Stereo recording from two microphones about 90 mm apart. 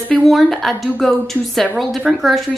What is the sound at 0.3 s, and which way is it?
A woman's voice, centre (ahead or behind).